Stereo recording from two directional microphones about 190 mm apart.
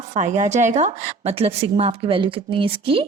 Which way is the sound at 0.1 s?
40° right (ahead or behind).